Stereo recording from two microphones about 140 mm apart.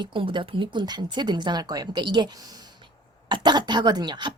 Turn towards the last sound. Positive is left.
turn(degrees=-30)  # may be behind; listen again after turning